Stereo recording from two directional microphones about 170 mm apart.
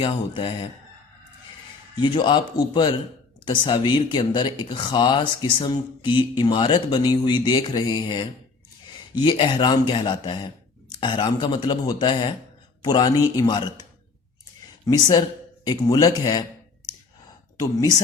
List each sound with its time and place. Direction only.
0.0 s speech: 30° left (ahead or behind)
2.0 s speech: 30° left (ahead or behind)
14.8 s speech: 25° left (ahead or behind)